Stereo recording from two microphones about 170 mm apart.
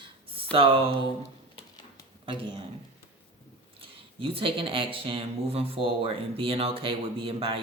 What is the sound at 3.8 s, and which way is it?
Speech, 30° right (ahead or behind).